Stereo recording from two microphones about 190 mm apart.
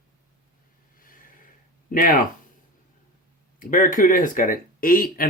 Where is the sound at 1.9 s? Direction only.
45° left (ahead or behind).